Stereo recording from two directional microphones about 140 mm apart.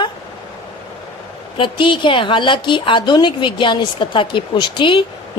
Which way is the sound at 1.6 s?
35° left (ahead or behind).